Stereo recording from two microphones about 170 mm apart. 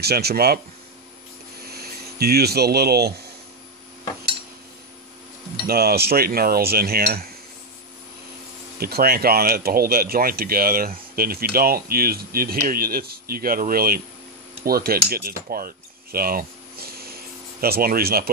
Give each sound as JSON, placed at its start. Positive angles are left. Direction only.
{"t": 0.0, "sound": "speech", "side_deg": -70}
{"t": 1.7, "sound": "speech", "side_deg": -65}
{"t": 5.7, "sound": "speech", "side_deg": -65}
{"t": 8.7, "sound": "speech", "side_deg": -65}
{"t": 14.6, "sound": "cutlery", "side_deg": -60}
{"t": 17.6, "sound": "speech", "side_deg": -60}